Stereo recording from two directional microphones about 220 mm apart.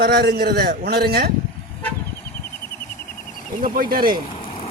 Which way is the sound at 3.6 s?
40° right (ahead or behind).